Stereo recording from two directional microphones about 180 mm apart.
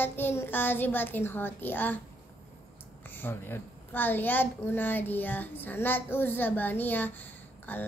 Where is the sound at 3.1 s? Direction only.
10° left (ahead or behind).